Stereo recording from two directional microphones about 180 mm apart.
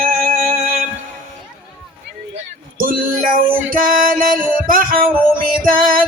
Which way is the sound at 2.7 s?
50° right (ahead or behind).